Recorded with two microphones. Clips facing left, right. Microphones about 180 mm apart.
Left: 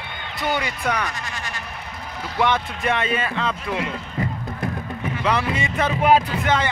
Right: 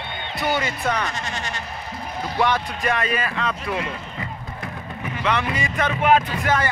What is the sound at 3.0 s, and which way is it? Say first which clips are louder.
Speech: left 1 dB; 25° left (ahead or behind).